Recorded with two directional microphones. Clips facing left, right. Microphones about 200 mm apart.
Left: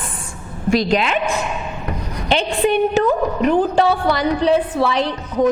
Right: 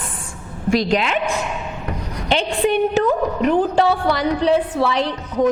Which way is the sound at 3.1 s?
25° left (ahead or behind).